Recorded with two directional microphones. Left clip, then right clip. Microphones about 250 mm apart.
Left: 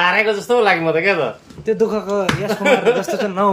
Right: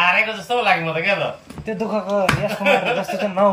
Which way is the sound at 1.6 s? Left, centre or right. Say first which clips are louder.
Left 6 dB; centre.